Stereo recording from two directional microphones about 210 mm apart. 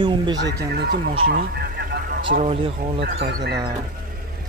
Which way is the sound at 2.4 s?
25° right (ahead or behind).